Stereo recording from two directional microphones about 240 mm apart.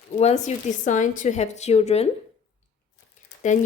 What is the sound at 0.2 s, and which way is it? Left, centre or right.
Speech, left.